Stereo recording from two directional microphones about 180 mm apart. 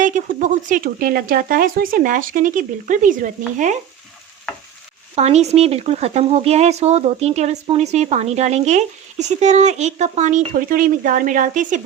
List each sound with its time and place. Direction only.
0.0 s speech: 45° right (ahead or behind)
5.1 s speech: 35° right (ahead or behind)